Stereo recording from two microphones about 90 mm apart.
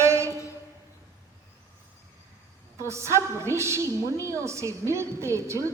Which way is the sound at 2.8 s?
30° right (ahead or behind).